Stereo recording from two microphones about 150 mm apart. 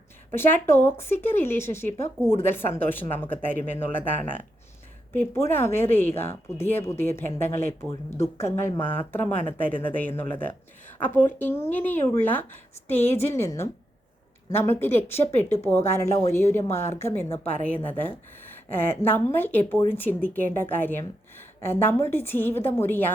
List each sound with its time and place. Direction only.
0.3 s a woman's voice: 15° left (ahead or behind)
5.1 s a woman's voice: 15° left (ahead or behind)